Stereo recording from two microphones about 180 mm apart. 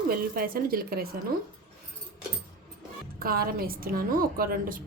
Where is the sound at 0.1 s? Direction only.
55° right (ahead or behind).